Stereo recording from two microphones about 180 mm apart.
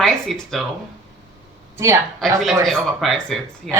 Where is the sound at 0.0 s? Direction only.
Centre (ahead or behind).